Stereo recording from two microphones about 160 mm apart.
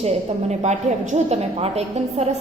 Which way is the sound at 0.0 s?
45° right (ahead or behind).